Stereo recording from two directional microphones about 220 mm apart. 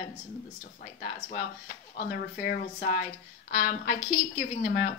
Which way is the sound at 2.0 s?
45° left (ahead or behind).